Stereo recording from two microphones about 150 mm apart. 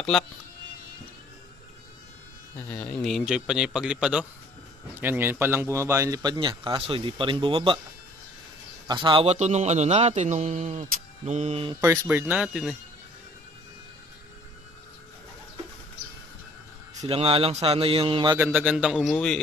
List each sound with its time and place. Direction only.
2.5 s speech: 10° left (ahead or behind); by 7.8 s 35° right (ahead or behind)
8.8 s a man's voice: 30° right (ahead or behind); by 11.6 s 50° right (ahead or behind)
11.8 s speech: 20° right (ahead or behind)
17.0 s a man's voice: 40° right (ahead or behind)
18.4 s speech: 10° right (ahead or behind)